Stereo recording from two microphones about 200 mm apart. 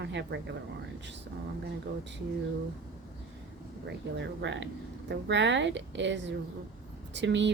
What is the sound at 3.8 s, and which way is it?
A woman's voice, 60° right (ahead or behind).